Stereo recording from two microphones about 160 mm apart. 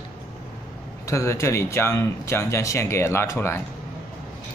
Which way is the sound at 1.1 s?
20° left (ahead or behind).